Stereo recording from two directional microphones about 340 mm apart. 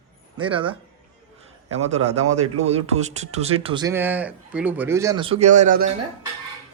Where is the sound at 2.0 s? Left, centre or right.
Centre.